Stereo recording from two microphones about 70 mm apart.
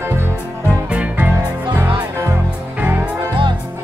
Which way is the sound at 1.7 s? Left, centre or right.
Right.